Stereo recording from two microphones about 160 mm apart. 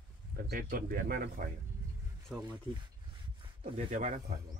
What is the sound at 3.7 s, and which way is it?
Speech, 45° right (ahead or behind).